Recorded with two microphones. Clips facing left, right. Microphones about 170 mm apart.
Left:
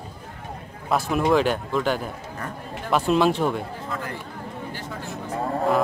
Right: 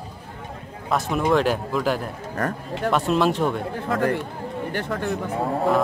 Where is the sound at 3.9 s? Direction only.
60° right (ahead or behind).